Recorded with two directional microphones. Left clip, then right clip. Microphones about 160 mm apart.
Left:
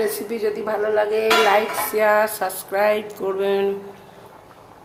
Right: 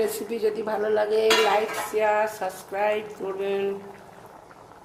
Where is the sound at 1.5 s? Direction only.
5° right (ahead or behind).